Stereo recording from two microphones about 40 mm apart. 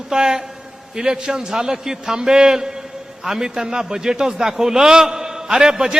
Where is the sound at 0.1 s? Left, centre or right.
Centre.